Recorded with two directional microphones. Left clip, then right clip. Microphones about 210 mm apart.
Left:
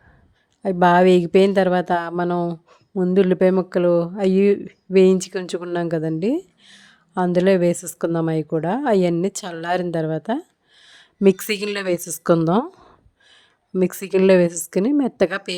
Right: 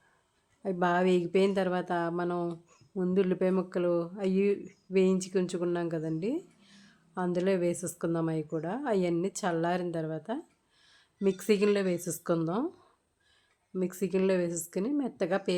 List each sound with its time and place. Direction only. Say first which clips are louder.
0.6 s a woman's voice: left 13 dB; 35° left (ahead or behind)